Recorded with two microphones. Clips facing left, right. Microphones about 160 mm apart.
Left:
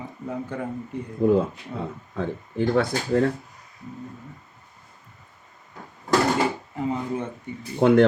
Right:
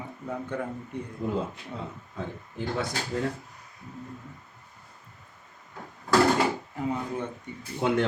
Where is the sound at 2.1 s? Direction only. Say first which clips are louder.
Left 10 dB; 70° left (ahead or behind).